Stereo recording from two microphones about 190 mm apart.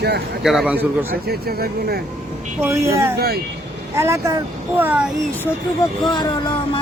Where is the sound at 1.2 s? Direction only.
55° right (ahead or behind).